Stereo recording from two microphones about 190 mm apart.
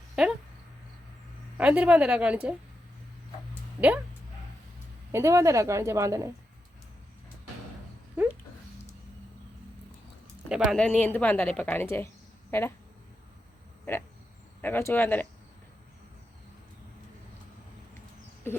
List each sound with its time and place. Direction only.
0.2 s a sound: centre (ahead or behind)
1.5 s a woman's voice: 5° right (ahead or behind)
3.8 s speech: 5° right (ahead or behind)
5.1 s speech: 15° right (ahead or behind)
8.2 s dog: 10° right (ahead or behind)
10.5 s speech: centre (ahead or behind)
14.6 s speech: 10° left (ahead or behind)